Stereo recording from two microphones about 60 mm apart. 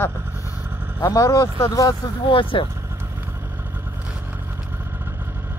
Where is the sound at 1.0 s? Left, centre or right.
Left.